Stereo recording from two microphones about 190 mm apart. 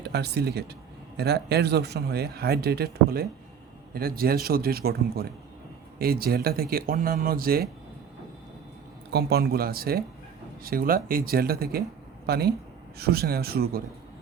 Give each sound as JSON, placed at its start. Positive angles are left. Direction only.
{"t": 0.0, "sound": "speech", "side_deg": -60}
{"t": 9.1, "sound": "speech", "side_deg": -55}